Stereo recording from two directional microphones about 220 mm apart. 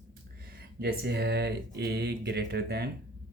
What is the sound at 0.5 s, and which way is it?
Speech, 45° right (ahead or behind).